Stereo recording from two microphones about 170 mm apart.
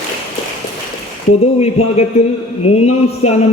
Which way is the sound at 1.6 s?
40° left (ahead or behind).